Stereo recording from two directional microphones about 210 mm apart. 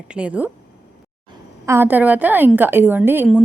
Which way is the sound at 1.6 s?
10° right (ahead or behind).